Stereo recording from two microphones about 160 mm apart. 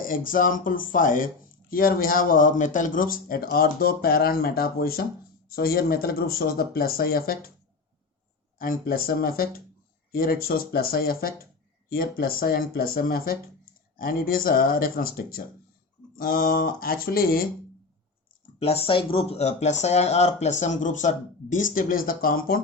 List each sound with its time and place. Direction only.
0.0 s speech: 60° left (ahead or behind)
8.5 s speech: 60° left (ahead or behind)
18.6 s speech: 40° left (ahead or behind); by 22.6 s 65° left (ahead or behind)